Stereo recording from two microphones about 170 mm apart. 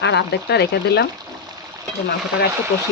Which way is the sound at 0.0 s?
85° left.